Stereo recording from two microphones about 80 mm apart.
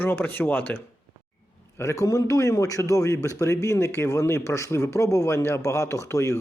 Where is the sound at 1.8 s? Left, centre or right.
Left.